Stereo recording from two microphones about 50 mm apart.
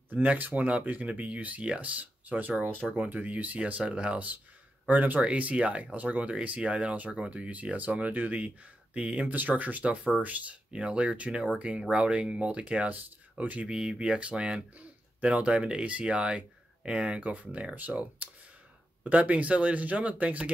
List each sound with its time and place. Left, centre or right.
0.1 s speech: right
10.7 s speech: right
13.7 s speech: centre; by 20.5 s right